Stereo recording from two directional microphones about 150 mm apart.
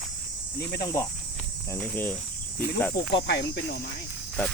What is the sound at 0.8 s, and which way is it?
Speech, 25° left (ahead or behind).